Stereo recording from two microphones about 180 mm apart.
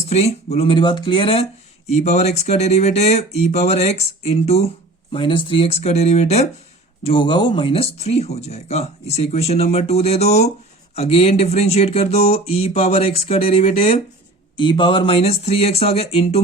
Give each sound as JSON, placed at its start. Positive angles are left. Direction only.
{"t": 0.0, "sound": "speech", "side_deg": 35}